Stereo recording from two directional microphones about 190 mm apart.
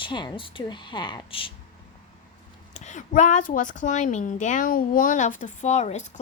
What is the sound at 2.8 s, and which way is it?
A woman's voice, 40° left (ahead or behind).